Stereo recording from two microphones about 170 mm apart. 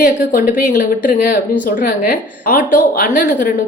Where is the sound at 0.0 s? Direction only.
55° left (ahead or behind).